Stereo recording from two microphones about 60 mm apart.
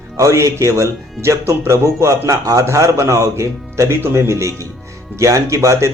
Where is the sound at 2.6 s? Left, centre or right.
Right.